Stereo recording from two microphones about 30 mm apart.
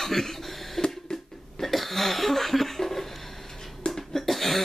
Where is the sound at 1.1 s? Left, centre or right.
Left.